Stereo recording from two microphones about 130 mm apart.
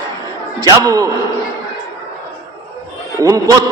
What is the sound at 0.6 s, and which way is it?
Speech, 30° right (ahead or behind).